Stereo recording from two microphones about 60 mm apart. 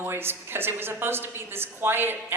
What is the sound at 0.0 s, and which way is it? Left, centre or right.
A woman's voice, right.